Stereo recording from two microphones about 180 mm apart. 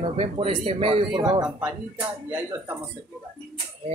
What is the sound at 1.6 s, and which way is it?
Speech, 10° right (ahead or behind).